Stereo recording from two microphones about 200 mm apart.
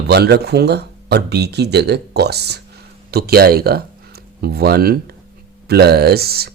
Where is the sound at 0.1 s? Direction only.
55° right (ahead or behind).